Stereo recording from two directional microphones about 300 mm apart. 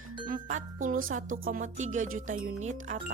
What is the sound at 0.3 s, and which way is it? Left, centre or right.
Speech, right.